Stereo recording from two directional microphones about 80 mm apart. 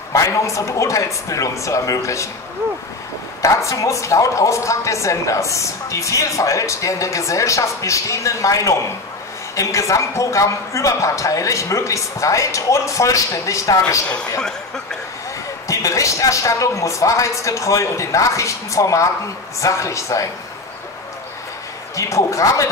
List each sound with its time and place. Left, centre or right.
0.1 s a woman's voice: left
3.4 s a woman's voice: left
15.7 s a woman's voice: left
21.9 s a woman's voice: left